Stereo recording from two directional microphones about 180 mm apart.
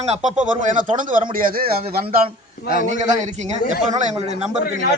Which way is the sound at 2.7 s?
45° right (ahead or behind).